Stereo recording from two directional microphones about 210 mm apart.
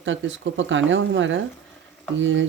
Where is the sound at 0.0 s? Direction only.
65° right (ahead or behind).